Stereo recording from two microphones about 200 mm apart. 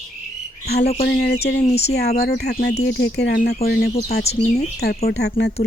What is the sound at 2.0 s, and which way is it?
Speech, 50° left (ahead or behind).